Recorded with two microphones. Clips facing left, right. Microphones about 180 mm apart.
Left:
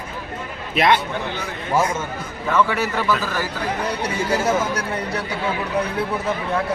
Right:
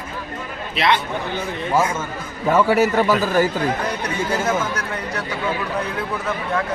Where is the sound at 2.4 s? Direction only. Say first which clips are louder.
Right 4 dB; 35° right (ahead or behind).